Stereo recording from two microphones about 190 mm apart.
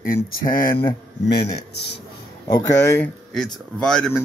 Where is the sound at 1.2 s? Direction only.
65° left (ahead or behind).